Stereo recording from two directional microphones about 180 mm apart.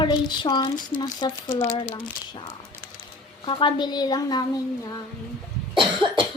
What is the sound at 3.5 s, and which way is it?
Speech, 30° left (ahead or behind).